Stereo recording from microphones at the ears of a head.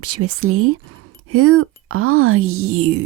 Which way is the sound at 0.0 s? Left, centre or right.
Right.